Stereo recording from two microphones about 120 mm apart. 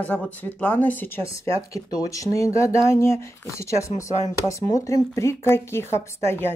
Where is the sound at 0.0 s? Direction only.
10° left (ahead or behind).